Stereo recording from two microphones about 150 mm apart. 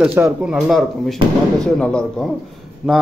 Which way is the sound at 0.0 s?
10° right (ahead or behind).